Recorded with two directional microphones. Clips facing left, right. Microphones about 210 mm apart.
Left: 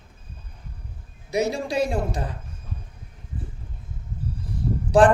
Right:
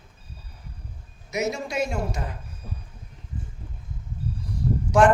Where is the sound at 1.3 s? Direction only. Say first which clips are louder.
Left 3 dB; 30° left (ahead or behind).